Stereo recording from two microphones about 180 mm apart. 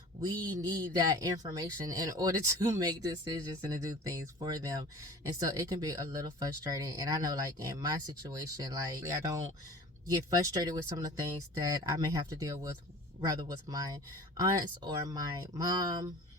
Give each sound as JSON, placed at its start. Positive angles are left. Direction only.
{"t": 0.3, "sound": "speech", "side_deg": -25}